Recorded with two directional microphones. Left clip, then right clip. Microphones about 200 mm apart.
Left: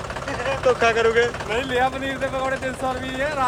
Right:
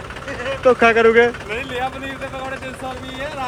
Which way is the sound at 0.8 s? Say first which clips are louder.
Right 7 dB; 30° right (ahead or behind).